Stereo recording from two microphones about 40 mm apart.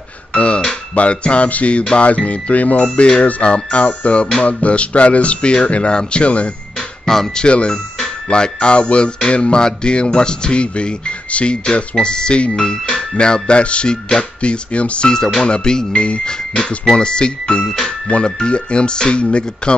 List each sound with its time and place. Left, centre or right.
0.3 s doorbell: left
0.9 s speech: left; by 13.2 s centre
13.2 s speech: left
15.0 s speech: centre
17.6 s speech: centre
18.2 s speech: left